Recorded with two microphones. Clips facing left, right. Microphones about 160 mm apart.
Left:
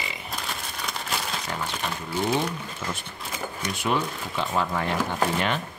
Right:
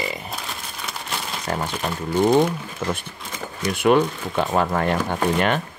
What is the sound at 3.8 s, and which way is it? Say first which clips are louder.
Speech: right 10 dB; 55° right (ahead or behind).